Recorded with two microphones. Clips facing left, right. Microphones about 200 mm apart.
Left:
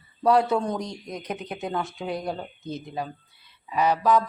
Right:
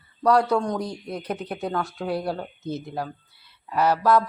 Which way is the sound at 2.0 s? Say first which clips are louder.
Right 5 dB; 15° left (ahead or behind).